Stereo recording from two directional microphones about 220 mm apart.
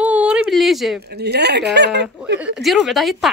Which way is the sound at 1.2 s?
50° right (ahead or behind).